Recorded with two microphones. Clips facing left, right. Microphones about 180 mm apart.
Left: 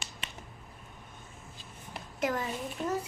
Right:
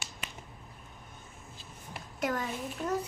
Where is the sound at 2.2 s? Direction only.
Centre (ahead or behind).